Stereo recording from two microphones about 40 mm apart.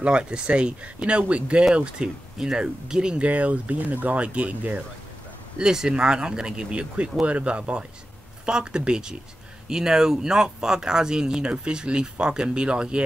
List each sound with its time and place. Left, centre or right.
0.0 s speech: right
3.2 s speech: right
5.6 s speech: centre